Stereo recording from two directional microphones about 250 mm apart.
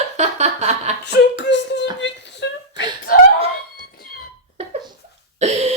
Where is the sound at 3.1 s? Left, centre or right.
Left.